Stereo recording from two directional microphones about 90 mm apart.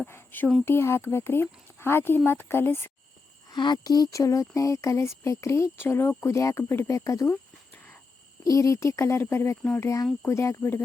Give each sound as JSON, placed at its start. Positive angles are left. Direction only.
{"t": 0.0, "sound": "speech", "side_deg": 25}
{"t": 3.5, "sound": "speech", "side_deg": 55}
{"t": 8.4, "sound": "speech", "side_deg": 35}